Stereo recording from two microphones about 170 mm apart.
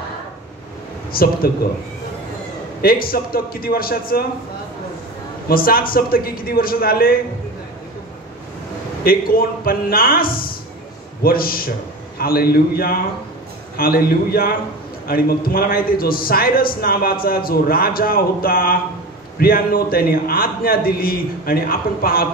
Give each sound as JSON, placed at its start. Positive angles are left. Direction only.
{"t": 1.1, "sound": "a man's voice", "side_deg": 60}
{"t": 2.8, "sound": "a man's voice", "side_deg": 60}
{"t": 5.5, "sound": "a man's voice", "side_deg": 60}
{"t": 9.0, "sound": "a man's voice", "side_deg": 60}